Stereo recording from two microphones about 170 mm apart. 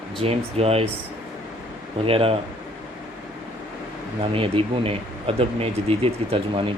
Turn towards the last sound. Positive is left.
turn(degrees=-30)  # may be behind; listen again after turning